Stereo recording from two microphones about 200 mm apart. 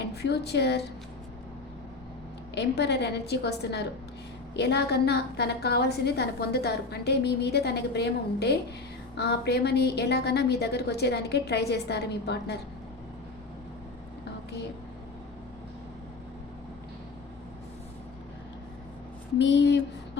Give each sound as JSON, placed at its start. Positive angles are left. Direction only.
{"t": 0.2, "sound": "a woman's voice", "side_deg": 55}
{"t": 2.6, "sound": "a woman's voice", "side_deg": 60}
{"t": 19.4, "sound": "a woman's voice", "side_deg": 60}